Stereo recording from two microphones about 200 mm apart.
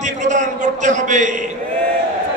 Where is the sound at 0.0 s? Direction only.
40° right (ahead or behind).